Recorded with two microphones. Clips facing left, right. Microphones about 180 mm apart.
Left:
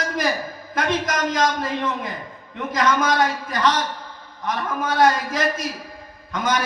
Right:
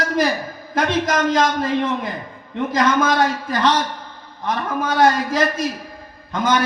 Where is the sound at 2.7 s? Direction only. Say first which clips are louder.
Right 2 dB; 30° right (ahead or behind).